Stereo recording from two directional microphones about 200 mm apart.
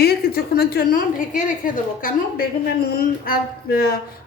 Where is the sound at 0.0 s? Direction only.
50° left (ahead or behind).